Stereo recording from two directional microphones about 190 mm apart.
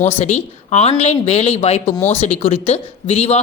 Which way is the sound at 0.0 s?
35° left (ahead or behind).